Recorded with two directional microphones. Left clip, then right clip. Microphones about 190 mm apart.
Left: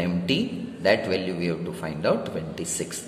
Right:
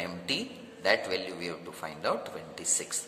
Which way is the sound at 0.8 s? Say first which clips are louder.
Left 6 dB; 25° right (ahead or behind).